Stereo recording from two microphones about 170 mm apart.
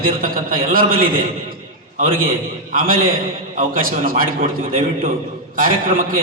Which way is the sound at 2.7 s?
55° right (ahead or behind).